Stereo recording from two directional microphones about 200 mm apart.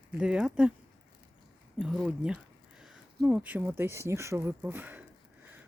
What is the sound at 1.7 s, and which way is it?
Speech, centre (ahead or behind).